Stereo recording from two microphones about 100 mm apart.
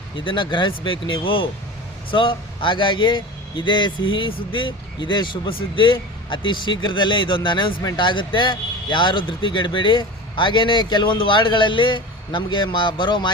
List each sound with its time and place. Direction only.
0.3 s a man's voice: 50° left (ahead or behind)